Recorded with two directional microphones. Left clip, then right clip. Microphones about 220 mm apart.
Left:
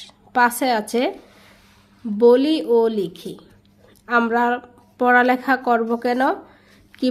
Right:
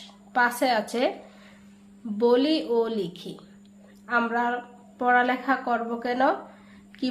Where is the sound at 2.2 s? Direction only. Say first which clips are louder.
Left 7 dB; 35° left (ahead or behind).